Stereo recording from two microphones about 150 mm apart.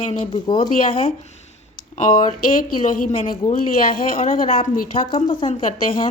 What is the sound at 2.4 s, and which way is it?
A woman's voice, 65° left (ahead or behind).